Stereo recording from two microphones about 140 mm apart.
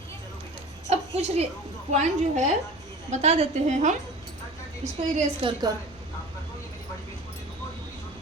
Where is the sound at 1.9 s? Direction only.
55° right (ahead or behind).